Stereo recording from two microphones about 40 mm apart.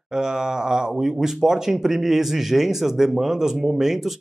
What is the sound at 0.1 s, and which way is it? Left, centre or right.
Speech, centre.